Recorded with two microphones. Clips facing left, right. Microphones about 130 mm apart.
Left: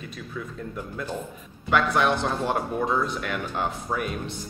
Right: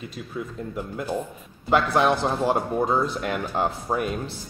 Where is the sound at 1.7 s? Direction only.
30° right (ahead or behind).